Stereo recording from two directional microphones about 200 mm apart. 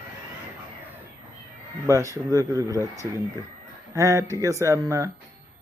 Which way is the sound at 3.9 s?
15° right (ahead or behind).